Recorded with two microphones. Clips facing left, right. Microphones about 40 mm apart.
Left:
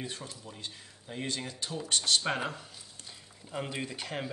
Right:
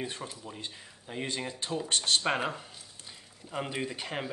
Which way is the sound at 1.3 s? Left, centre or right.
Right.